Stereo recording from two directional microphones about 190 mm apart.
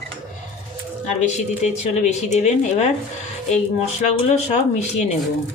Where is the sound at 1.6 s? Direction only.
35° left (ahead or behind).